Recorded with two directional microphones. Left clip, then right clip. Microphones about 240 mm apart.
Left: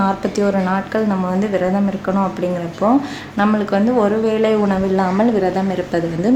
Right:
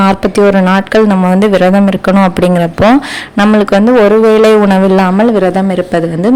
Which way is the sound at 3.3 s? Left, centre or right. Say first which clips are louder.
Right 9 dB; right.